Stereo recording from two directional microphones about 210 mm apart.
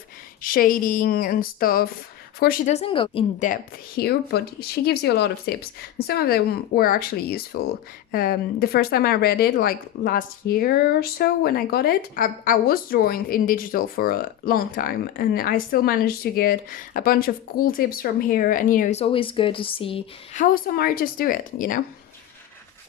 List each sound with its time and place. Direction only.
0.4 s a woman's voice: 45° left (ahead or behind); by 3.2 s 25° left (ahead or behind)
3.3 s speech: 35° left (ahead or behind)